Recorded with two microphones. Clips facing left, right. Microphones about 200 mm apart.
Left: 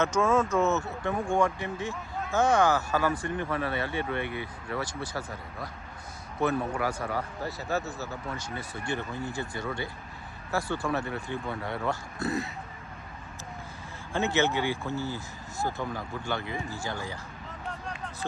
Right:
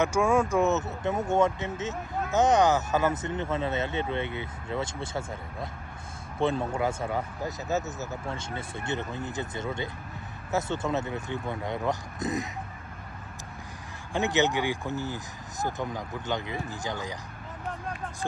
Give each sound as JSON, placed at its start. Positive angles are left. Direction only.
{"t": 0.0, "sound": "speech", "side_deg": -15}
{"t": 14.1, "sound": "speech", "side_deg": -15}